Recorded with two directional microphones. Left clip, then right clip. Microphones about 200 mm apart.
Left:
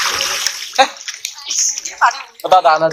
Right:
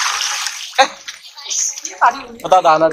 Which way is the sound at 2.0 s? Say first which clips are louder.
Even; 50° left (ahead or behind).